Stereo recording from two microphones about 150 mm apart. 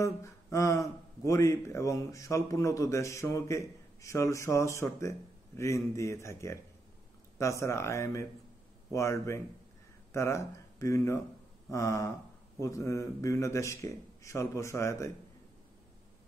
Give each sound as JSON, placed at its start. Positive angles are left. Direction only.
{"t": 0.0, "sound": "speech", "side_deg": 20}